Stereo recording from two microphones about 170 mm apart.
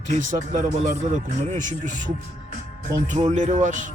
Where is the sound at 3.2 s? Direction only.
40° right (ahead or behind).